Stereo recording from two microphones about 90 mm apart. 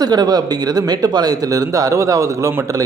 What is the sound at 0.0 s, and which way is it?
Speech, 45° right (ahead or behind).